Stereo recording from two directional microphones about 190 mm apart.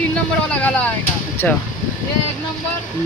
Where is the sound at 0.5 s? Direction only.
10° left (ahead or behind).